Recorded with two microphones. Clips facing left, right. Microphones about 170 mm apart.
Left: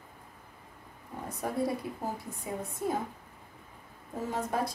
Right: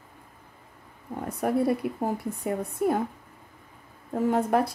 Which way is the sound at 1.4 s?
65° right (ahead or behind).